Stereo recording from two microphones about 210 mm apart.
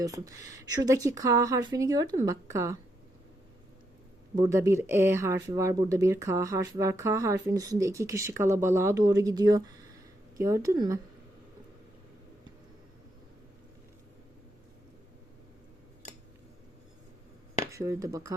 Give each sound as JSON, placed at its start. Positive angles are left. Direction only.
{"t": 0.0, "sound": "speech", "side_deg": -15}
{"t": 4.4, "sound": "speech", "side_deg": -15}
{"t": 17.7, "sound": "speech", "side_deg": -15}